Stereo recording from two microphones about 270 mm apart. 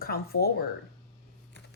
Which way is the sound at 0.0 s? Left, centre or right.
Left.